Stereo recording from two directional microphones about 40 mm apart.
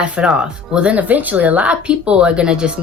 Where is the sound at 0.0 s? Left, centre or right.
Right.